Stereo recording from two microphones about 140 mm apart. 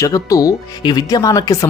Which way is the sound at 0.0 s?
25° left (ahead or behind).